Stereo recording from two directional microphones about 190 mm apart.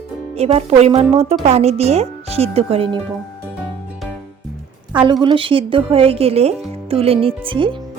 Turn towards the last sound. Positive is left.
turn(degrees=-25)  # may be behind; listen again after turning